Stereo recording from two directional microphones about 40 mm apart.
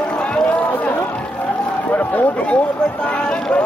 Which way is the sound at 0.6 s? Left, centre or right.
Left.